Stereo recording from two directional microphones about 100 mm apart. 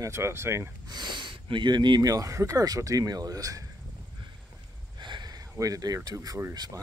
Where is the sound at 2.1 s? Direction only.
30° right (ahead or behind).